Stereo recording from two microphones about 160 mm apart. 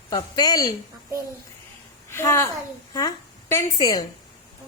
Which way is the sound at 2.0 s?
15° left (ahead or behind).